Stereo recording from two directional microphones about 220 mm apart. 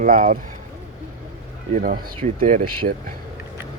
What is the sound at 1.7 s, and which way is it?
Speech, 40° right (ahead or behind).